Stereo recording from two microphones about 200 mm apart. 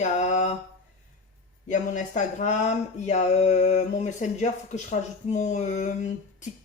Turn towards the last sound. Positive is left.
turn(degrees=40)  # may be behind; listen again after turning